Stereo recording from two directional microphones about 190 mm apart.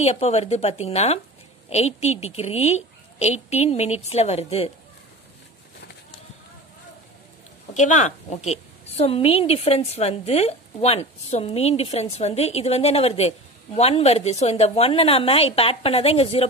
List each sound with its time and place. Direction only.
0.0 s a woman's voice: 35° left (ahead or behind)
7.7 s a woman's voice: 40° left (ahead or behind)